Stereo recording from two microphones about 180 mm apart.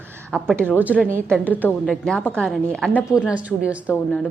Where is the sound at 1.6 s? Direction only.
5° left (ahead or behind).